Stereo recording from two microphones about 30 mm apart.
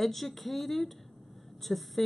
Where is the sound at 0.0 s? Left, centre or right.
Centre.